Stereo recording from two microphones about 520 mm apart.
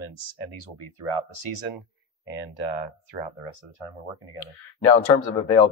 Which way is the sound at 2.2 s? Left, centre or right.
Left.